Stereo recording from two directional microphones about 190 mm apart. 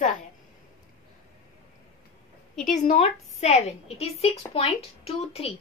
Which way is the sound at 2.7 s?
35° left (ahead or behind).